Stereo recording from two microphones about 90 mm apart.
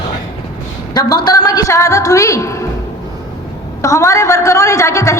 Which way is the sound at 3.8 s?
35° left (ahead or behind).